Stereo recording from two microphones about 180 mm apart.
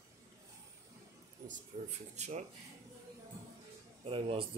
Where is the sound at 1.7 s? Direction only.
45° right (ahead or behind).